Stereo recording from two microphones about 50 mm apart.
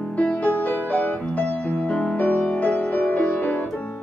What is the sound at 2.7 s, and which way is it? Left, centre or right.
Music, left.